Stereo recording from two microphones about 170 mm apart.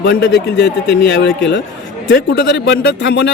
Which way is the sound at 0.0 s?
75° left (ahead or behind).